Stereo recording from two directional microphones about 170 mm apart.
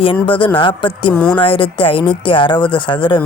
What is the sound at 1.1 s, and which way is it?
Speech, 5° left (ahead or behind).